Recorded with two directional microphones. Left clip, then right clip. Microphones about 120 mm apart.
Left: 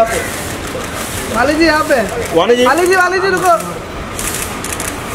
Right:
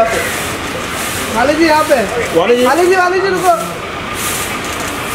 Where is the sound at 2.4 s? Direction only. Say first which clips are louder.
Even; 45° left (ahead or behind).